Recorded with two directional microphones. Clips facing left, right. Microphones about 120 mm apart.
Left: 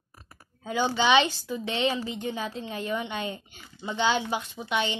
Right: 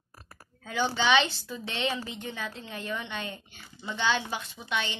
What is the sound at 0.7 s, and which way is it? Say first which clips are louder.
A woman's voice: left 3 dB; 15° left (ahead or behind).